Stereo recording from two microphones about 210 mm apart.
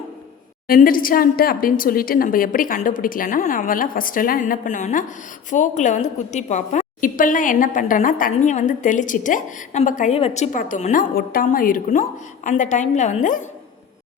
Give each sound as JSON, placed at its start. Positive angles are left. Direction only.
{"t": 0.7, "sound": "a woman's voice", "side_deg": 40}